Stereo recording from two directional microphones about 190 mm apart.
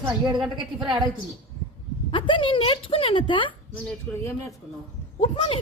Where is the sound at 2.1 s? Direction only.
25° left (ahead or behind).